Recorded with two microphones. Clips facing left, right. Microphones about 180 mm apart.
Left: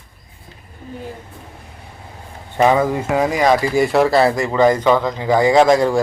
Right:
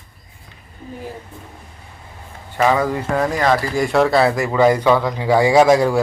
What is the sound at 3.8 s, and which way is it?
Speech, centre (ahead or behind).